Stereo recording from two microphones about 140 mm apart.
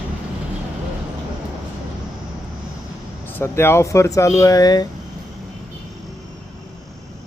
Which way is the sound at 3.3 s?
15° left (ahead or behind).